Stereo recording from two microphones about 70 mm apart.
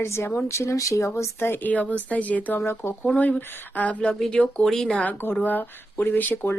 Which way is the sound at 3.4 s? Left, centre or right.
Left.